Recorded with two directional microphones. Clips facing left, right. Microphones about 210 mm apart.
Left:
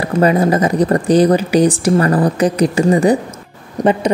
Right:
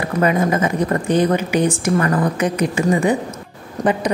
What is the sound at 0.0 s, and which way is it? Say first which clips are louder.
A woman's voice: left 4 dB; 35° left (ahead or behind).